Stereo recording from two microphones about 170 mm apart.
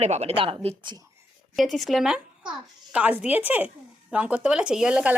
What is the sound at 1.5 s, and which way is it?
A woman's voice, centre (ahead or behind).